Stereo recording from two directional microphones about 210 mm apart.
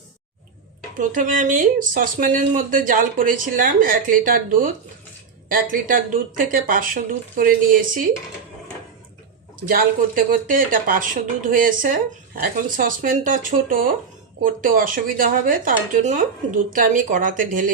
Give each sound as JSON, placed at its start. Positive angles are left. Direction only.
{"t": 0.9, "sound": "speech", "side_deg": -40}
{"t": 9.6, "sound": "speech", "side_deg": -40}